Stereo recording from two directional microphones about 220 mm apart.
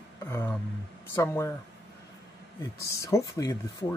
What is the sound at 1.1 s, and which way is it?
Speech, 10° left (ahead or behind).